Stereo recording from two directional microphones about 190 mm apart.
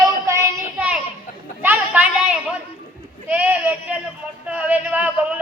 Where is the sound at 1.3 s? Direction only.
45° left (ahead or behind).